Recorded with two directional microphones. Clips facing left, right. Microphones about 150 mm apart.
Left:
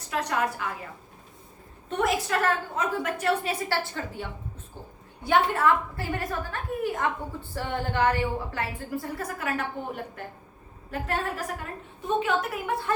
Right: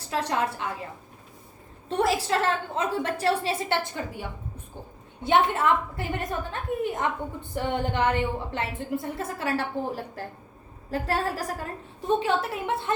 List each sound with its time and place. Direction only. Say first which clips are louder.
0.1 s a woman's voice: right 1 dB; 30° right (ahead or behind)
1.9 s a woman's voice: right 2 dB; 30° right (ahead or behind)